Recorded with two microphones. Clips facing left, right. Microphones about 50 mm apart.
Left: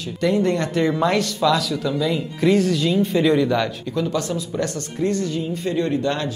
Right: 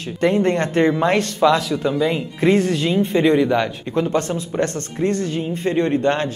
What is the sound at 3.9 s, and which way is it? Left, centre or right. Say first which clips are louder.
Speech: right 5 dB; right.